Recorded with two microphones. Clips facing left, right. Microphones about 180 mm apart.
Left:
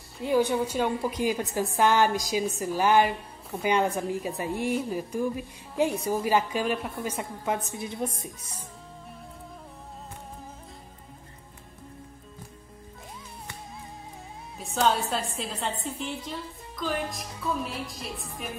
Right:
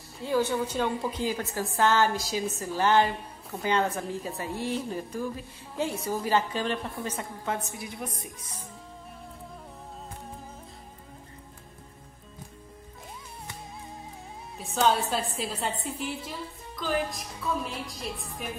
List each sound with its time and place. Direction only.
0.2 s a woman's voice: 15° left (ahead or behind)
14.6 s a woman's voice: centre (ahead or behind)